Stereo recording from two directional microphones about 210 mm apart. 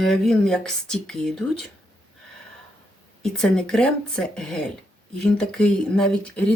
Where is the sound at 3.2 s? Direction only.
Centre (ahead or behind).